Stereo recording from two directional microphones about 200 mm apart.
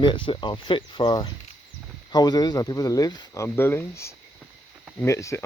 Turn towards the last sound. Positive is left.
turn(degrees=15)  # may be behind; listen again after turning